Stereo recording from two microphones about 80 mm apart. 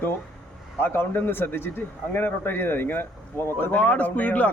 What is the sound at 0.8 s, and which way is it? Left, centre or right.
A man's voice, left.